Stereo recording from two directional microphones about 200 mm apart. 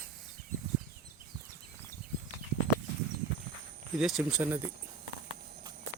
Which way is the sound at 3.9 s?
5° right (ahead or behind).